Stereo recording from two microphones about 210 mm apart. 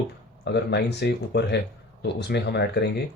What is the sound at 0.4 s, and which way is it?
Speech, 55° left (ahead or behind).